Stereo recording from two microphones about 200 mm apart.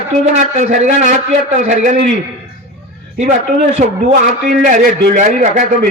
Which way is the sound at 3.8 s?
35° right (ahead or behind).